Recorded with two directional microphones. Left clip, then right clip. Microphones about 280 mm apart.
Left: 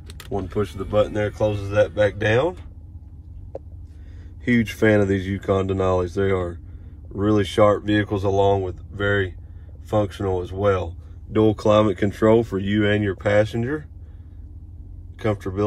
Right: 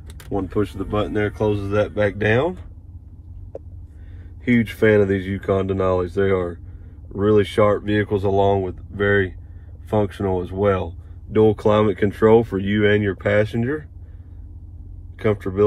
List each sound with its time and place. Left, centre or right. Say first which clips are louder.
0.3 s speech: right 2 dB; centre
4.5 s speech: right 2 dB; left
15.1 s speech: right 3 dB; centre